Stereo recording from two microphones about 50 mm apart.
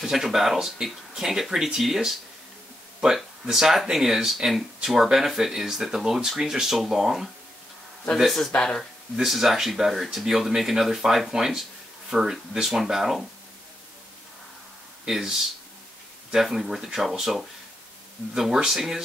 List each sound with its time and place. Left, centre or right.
0.0 s speech: centre
3.4 s speech: centre
8.5 s speech: centre
9.1 s speech: centre
15.0 s speech: centre